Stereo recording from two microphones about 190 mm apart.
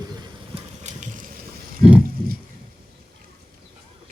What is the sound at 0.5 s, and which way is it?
Vehicle, 40° right (ahead or behind).